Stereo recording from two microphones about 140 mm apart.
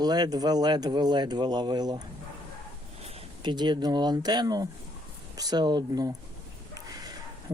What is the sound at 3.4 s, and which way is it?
Speech, 30° right (ahead or behind).